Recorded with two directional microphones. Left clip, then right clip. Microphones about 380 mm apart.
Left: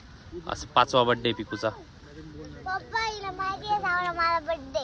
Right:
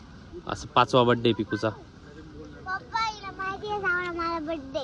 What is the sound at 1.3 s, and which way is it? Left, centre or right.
Speech, centre.